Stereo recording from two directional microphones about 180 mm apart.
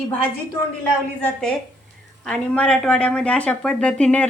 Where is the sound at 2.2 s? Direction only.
5° left (ahead or behind).